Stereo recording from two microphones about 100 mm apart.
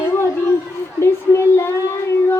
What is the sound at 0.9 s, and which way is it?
Speech, 25° left (ahead or behind).